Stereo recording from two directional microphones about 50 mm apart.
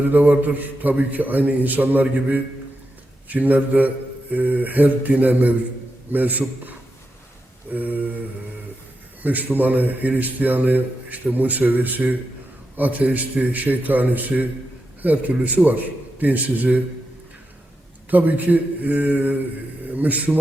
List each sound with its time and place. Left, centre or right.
0.0 s a man's voice: right
9.2 s a man's voice: right
18.1 s a man's voice: right